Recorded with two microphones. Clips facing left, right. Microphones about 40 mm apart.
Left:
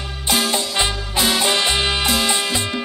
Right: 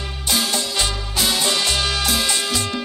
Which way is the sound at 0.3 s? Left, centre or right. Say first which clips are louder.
Left 2 dB; left.